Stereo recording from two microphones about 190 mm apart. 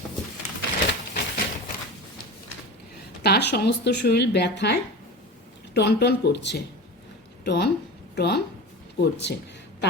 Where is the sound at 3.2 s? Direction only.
60° left (ahead or behind).